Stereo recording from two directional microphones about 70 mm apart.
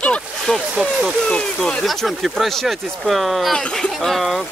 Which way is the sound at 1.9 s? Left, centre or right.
Centre.